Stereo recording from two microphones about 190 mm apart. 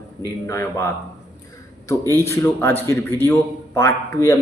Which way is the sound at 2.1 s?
15° left (ahead or behind).